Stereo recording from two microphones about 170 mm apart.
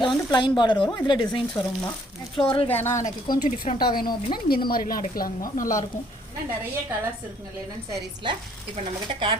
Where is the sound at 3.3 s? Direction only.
55° left (ahead or behind).